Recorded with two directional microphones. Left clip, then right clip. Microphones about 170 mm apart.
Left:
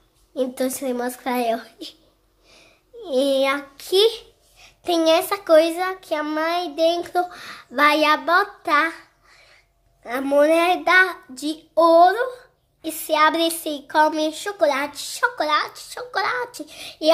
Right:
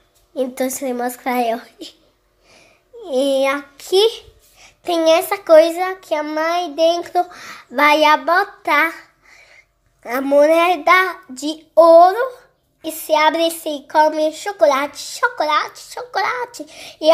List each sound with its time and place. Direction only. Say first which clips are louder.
0.3 s a child's voice: right 3 dB; 5° right (ahead or behind)
10.2 s child singing: right 4 dB; 5° right (ahead or behind)
12.8 s speech: right 3 dB; centre (ahead or behind)